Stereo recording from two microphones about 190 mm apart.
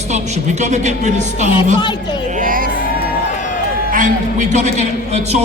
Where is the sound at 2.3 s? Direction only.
45° right (ahead or behind).